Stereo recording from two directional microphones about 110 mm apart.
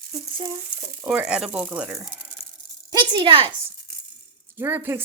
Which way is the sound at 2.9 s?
45° right (ahead or behind).